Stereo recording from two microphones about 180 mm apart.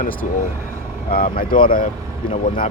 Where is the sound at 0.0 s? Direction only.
50° left (ahead or behind).